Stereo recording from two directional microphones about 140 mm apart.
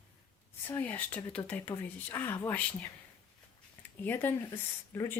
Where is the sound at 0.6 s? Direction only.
15° left (ahead or behind).